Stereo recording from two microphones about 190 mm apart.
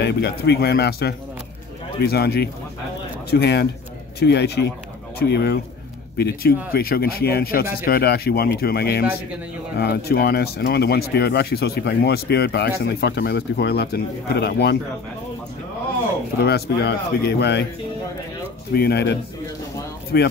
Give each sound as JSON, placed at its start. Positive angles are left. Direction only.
{"t": 0.0, "sound": "speech", "side_deg": 60}
{"t": 16.4, "sound": "speech", "side_deg": 60}
{"t": 18.7, "sound": "speech", "side_deg": 55}